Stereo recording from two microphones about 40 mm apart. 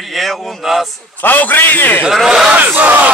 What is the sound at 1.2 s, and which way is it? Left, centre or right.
Speech, left.